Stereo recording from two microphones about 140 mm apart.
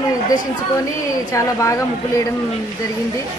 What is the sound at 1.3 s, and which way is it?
Speech, 20° left (ahead or behind).